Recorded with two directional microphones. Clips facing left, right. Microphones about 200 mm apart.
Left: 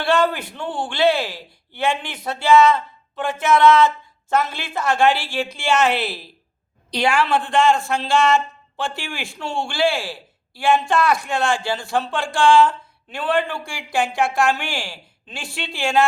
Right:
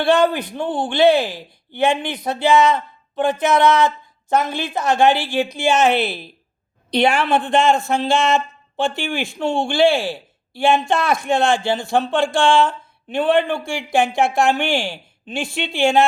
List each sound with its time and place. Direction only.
0.0 s speech: 20° right (ahead or behind)